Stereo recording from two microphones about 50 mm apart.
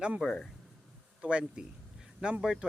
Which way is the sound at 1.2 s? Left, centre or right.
Right.